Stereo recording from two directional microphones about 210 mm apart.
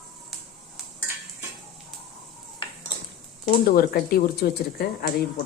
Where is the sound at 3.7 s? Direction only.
45° left (ahead or behind).